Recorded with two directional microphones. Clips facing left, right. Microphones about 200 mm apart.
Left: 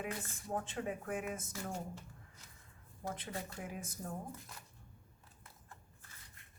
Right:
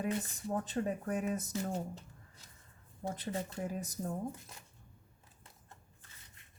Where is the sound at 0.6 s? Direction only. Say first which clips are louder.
Right 5 dB; 40° right (ahead or behind).